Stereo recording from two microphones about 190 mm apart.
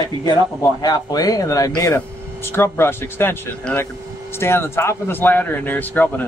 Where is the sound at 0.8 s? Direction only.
20° left (ahead or behind).